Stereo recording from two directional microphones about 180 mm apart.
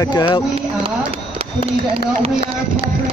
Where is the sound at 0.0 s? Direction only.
25° left (ahead or behind).